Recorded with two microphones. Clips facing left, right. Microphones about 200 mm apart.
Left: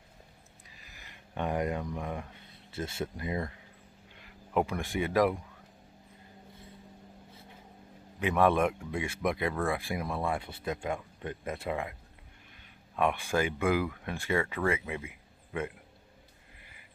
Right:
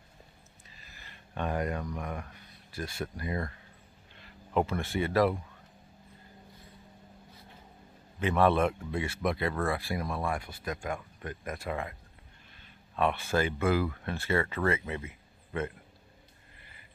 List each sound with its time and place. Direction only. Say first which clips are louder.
0.7 s speech: even; 15° left (ahead or behind)
8.2 s speech: even; 15° left (ahead or behind)